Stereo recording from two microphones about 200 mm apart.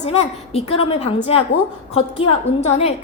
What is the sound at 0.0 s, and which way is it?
A woman's voice, 30° left (ahead or behind).